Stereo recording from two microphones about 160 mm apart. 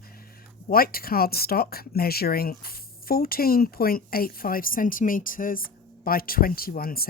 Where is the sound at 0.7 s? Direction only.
70° left (ahead or behind).